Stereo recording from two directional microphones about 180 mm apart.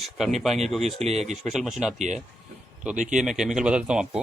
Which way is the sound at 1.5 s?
Centre (ahead or behind).